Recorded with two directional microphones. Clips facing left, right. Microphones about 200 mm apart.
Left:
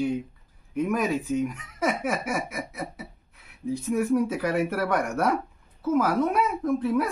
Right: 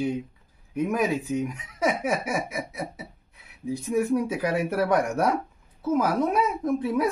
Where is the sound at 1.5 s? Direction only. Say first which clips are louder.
Right 1 dB; 15° right (ahead or behind).